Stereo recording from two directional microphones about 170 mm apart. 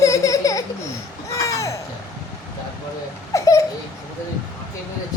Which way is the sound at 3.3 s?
20° left (ahead or behind).